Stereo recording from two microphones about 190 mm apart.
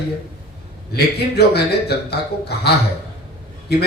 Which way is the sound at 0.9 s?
60° left (ahead or behind).